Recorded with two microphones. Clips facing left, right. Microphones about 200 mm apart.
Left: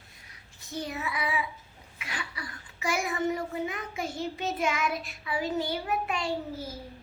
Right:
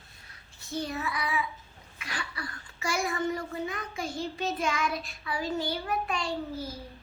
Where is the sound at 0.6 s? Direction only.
15° left (ahead or behind).